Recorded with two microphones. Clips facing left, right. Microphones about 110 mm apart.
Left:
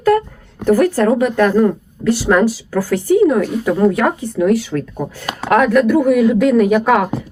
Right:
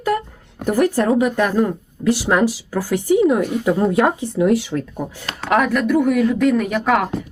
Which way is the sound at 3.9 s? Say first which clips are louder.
Even; 25° right (ahead or behind).